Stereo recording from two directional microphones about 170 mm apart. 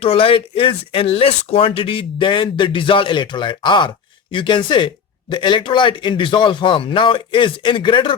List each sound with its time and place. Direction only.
0.0 s speech: 35° left (ahead or behind)